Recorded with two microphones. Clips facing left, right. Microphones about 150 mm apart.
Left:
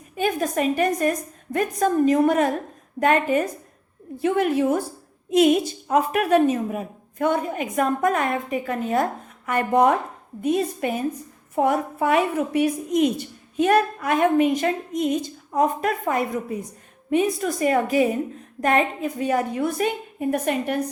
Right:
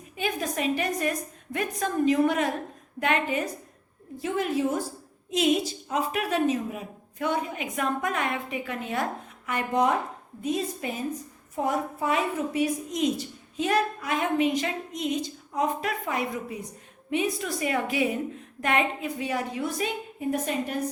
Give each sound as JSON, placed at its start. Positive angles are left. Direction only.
{"t": 0.2, "sound": "a woman's voice", "side_deg": 45}
{"t": 4.2, "sound": "a woman's voice", "side_deg": 60}
{"t": 9.5, "sound": "a woman's voice", "side_deg": 55}